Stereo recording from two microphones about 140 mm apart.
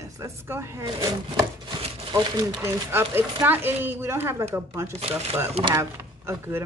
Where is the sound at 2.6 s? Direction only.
20° right (ahead or behind).